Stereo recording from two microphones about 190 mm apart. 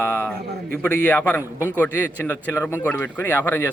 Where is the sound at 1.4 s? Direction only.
10° right (ahead or behind).